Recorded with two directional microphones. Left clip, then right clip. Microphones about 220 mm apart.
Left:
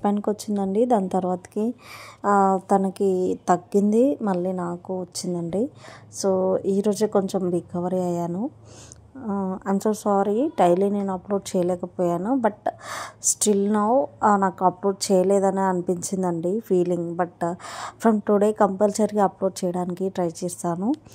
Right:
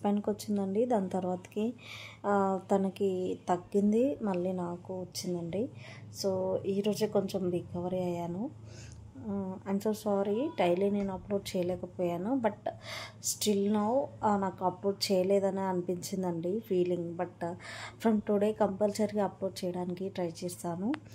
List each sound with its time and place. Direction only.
0.0 s a woman's voice: 30° left (ahead or behind)
9.2 s a woman's voice: 25° left (ahead or behind)